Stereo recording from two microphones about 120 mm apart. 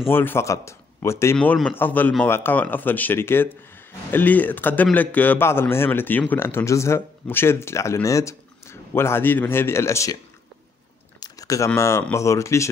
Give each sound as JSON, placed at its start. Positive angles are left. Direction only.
{"t": 0.1, "sound": "speech", "side_deg": 20}
{"t": 11.1, "sound": "a sound", "side_deg": 30}
{"t": 12.1, "sound": "speech", "side_deg": 25}